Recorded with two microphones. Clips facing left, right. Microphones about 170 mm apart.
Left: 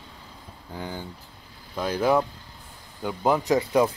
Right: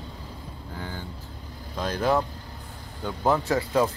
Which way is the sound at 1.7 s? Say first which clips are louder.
Left 2 dB; 10° left (ahead or behind).